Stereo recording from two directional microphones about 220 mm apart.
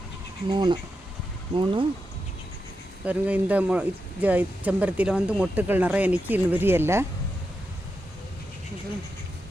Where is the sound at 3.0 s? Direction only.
5° right (ahead or behind).